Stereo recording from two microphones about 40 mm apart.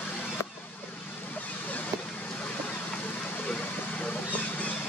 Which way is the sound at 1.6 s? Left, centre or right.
Left.